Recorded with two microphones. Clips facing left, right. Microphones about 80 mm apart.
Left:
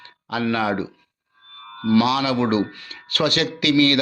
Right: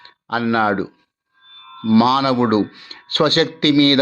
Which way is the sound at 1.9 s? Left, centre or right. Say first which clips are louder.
Right 4 dB; right.